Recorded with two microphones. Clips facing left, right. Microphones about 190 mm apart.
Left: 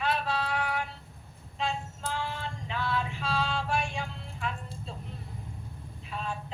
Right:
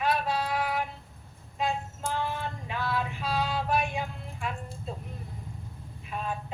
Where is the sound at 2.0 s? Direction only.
55° right (ahead or behind).